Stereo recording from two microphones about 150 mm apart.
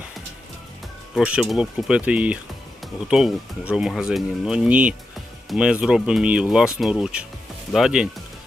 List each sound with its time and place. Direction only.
1.1 s speech: 5° right (ahead or behind)